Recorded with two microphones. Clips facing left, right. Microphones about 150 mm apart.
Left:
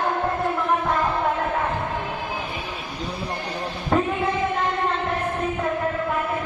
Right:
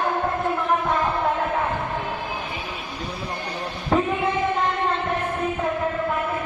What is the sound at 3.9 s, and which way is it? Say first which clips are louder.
Child singing: even; centre (ahead or behind).